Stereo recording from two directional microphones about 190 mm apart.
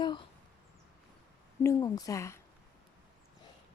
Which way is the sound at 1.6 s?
15° left (ahead or behind).